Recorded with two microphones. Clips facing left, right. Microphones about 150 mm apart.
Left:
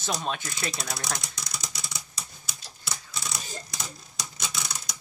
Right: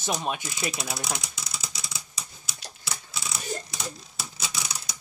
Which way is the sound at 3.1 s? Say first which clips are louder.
Right 6 dB; 5° right (ahead or behind).